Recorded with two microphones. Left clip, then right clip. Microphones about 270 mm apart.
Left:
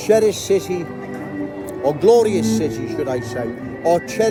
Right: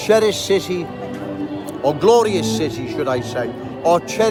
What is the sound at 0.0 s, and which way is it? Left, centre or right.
Speech, centre.